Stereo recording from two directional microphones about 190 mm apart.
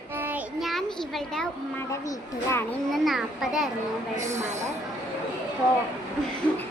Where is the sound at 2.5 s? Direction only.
5° left (ahead or behind).